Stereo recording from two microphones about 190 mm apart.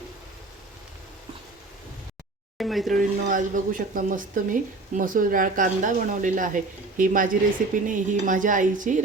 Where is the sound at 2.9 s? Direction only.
45° right (ahead or behind).